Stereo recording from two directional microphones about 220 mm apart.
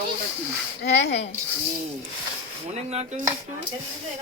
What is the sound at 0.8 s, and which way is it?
Speech, 50° left (ahead or behind).